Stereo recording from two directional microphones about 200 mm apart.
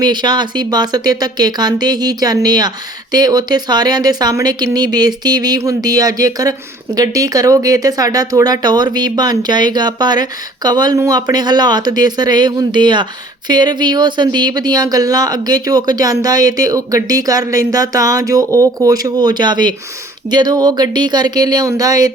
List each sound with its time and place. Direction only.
0.0 s speech: 20° right (ahead or behind)